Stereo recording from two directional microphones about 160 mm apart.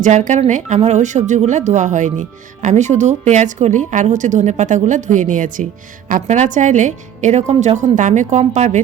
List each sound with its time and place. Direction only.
0.0 s speech: 50° right (ahead or behind)